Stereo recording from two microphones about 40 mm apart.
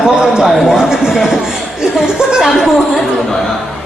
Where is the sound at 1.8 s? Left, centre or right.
Centre.